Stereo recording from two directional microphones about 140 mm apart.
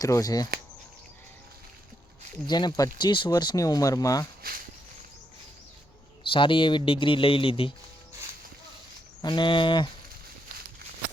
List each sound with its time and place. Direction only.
0.0 s speech: 25° left (ahead or behind)
2.5 s speech: 30° left (ahead or behind)
6.3 s speech: 35° left (ahead or behind)
9.2 s speech: 35° left (ahead or behind)